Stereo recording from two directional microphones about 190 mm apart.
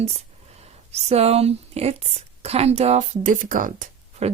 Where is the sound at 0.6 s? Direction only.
35° right (ahead or behind).